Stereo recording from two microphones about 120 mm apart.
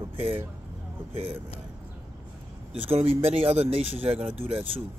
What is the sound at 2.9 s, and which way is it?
Speech, 50° right (ahead or behind).